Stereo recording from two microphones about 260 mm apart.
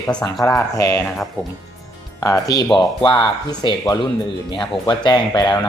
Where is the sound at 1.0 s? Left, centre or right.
Centre.